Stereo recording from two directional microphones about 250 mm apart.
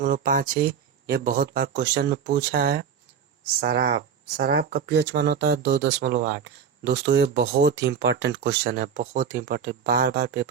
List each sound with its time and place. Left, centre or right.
0.0 s speech: right